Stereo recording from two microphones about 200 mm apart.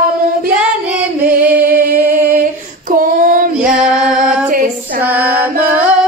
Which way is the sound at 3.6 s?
5° right (ahead or behind).